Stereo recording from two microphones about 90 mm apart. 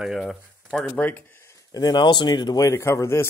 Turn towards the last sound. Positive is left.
turn(degrees=30)  # may be behind; listen again after turning